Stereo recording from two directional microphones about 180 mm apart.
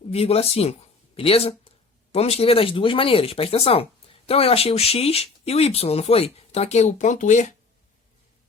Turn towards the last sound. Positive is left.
turn(degrees=40)  # may be behind; listen again after turning